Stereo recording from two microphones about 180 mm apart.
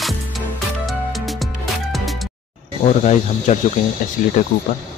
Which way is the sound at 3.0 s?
40° left (ahead or behind).